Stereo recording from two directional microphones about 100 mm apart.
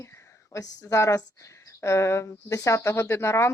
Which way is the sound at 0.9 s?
30° left (ahead or behind).